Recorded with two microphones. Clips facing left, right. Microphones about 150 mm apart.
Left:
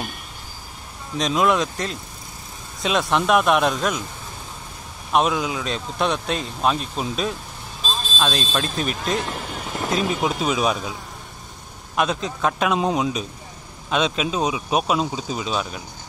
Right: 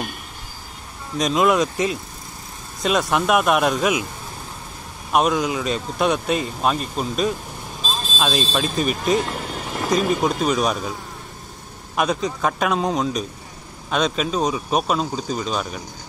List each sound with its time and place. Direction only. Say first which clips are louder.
1.1 s speech: right 2 dB; centre (ahead or behind)
5.1 s a man's voice: right 1 dB; centre (ahead or behind)